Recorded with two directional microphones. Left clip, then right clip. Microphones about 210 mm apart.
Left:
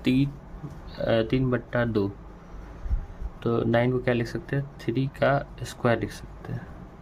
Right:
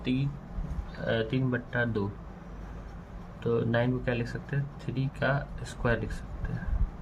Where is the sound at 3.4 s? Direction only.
40° left (ahead or behind).